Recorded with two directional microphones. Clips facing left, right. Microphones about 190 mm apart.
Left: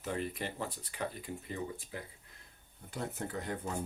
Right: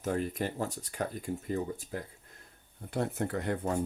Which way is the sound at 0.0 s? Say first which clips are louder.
Right 5 dB; 45° right (ahead or behind).